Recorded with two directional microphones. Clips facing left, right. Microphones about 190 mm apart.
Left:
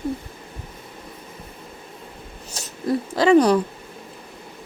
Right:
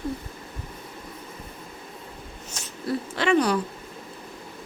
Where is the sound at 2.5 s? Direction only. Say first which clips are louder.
Left 5 dB; 40° left (ahead or behind).